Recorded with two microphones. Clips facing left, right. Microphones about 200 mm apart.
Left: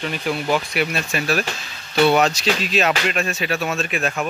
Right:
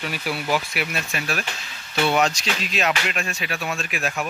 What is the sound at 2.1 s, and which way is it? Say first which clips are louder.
Speech: left 3 dB; 35° left (ahead or behind).